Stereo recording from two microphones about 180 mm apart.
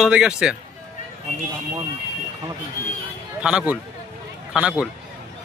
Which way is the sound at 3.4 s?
5° right (ahead or behind).